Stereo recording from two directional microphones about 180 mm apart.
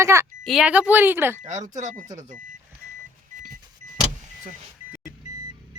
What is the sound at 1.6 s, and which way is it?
Speech, 45° right (ahead or behind).